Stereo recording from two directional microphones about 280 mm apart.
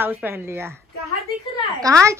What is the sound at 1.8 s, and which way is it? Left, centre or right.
Speech, centre.